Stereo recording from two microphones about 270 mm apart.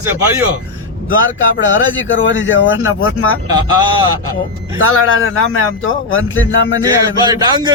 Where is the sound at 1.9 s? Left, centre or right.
Left.